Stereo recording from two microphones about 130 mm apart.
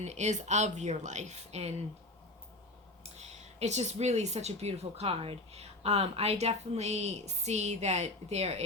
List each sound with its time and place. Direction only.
0.0 s speech: 60° right (ahead or behind)
3.0 s speech: 55° right (ahead or behind)